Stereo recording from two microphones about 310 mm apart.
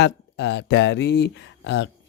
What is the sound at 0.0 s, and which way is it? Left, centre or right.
Speech, left.